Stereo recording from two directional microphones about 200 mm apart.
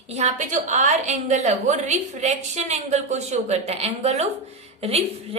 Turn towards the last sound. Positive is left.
turn(degrees=-30)  # may be behind; listen again after turning